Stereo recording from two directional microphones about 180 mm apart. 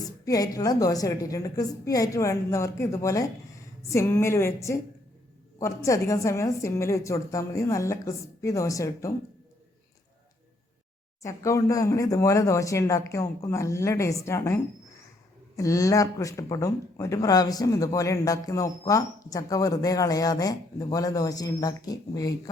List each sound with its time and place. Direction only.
0.3 s a woman's voice: 20° left (ahead or behind)
11.2 s a woman's voice: 15° left (ahead or behind)